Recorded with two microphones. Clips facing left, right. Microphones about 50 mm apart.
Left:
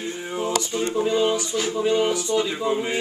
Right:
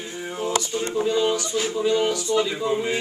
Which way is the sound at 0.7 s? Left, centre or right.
Left.